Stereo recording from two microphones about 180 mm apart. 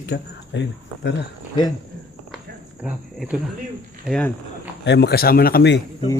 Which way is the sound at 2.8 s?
Centre (ahead or behind).